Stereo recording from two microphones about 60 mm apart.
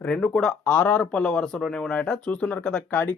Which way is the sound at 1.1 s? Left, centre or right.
Centre.